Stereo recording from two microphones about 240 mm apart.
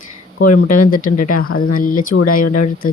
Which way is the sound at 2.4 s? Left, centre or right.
Left.